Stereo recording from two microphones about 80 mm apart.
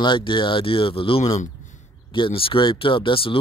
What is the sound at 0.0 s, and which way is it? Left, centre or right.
Speech, left.